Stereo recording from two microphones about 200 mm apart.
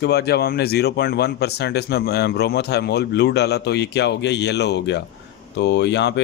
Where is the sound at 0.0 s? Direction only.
55° left (ahead or behind).